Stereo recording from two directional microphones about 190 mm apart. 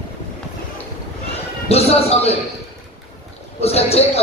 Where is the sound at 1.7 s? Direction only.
35° left (ahead or behind).